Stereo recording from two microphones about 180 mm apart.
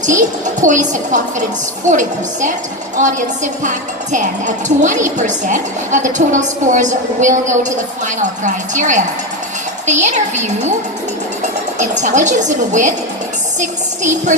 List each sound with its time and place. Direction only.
0.0 s speech: 45° right (ahead or behind)
3.6 s speech: 45° right (ahead or behind)
11.8 s speech: 40° right (ahead or behind)